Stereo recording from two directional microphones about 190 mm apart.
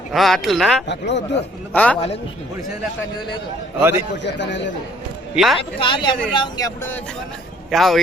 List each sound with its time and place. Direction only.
0.1 s speech: centre (ahead or behind)
0.9 s speech: 65° left (ahead or behind)
1.7 s a man's voice: 5° left (ahead or behind)
3.8 s a man's voice: 10° right (ahead or behind)
4.2 s a man's voice: 65° left (ahead or behind)
5.3 s speech: centre (ahead or behind)
5.8 s speech: 25° left (ahead or behind)
7.7 s speech: centre (ahead or behind)